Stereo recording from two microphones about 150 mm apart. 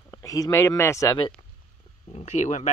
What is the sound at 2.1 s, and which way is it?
Speech, 50° left (ahead or behind).